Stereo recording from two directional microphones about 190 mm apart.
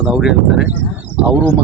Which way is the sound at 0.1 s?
5° right (ahead or behind).